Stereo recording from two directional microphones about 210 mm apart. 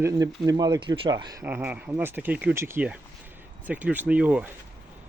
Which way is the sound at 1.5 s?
5° right (ahead or behind).